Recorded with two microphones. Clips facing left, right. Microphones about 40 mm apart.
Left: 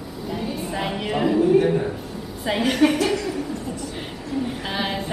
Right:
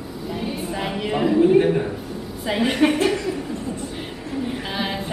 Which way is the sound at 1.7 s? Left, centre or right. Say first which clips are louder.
Right 1 dB; centre.